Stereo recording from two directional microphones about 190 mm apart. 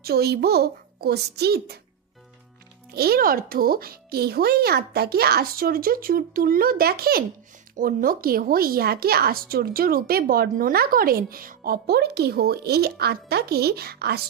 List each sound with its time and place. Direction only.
0.0 s a child's voice: 55° right (ahead or behind)
2.9 s a woman's voice: 55° right (ahead or behind)